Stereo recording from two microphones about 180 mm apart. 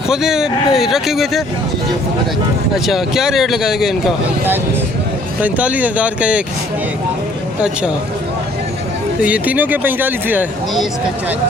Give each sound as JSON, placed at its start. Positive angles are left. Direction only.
{"t": 0.1, "sound": "speech", "side_deg": -5}
{"t": 2.7, "sound": "speech", "side_deg": 0}
{"t": 9.2, "sound": "speech", "side_deg": -10}